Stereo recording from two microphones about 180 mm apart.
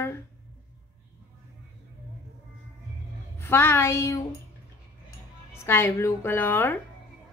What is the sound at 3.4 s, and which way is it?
Speech, 10° left (ahead or behind).